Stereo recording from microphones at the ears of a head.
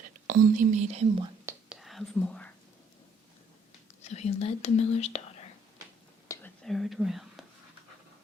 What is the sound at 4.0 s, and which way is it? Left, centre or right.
Speech, left.